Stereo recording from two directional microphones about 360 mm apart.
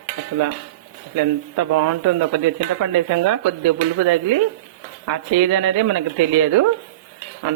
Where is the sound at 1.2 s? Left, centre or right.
Right.